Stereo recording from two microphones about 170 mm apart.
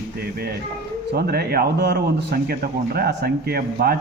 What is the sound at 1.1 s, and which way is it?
A man's voice, 65° right (ahead or behind).